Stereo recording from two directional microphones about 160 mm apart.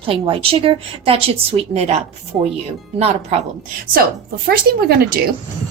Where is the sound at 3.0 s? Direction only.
40° right (ahead or behind).